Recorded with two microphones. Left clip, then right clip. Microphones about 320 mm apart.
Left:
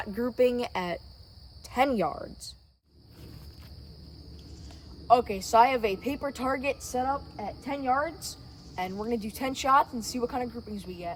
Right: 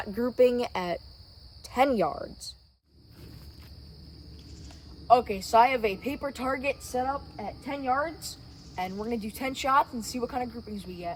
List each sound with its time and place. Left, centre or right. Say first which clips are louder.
0.0 s speech: right 2 dB; centre
5.0 s a woman's voice: right 1 dB; centre